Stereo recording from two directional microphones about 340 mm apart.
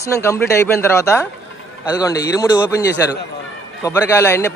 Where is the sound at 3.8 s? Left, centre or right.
Centre.